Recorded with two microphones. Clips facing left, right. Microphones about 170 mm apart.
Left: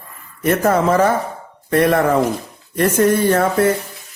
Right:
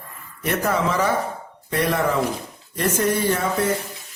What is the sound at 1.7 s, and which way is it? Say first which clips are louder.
Speech: left 7 dB; 55° left (ahead or behind).